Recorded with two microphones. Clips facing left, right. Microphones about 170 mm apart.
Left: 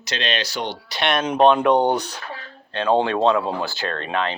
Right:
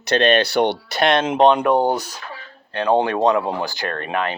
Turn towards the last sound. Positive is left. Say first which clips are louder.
# right 1 dB
turn(degrees=-15)  # may be behind; listen again after turning